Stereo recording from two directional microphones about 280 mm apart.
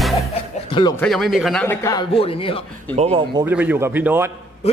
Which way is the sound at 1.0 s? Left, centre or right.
Centre.